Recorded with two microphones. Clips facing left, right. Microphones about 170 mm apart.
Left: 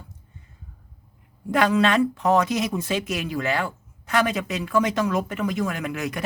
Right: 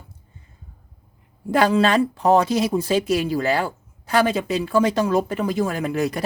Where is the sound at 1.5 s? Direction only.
30° right (ahead or behind).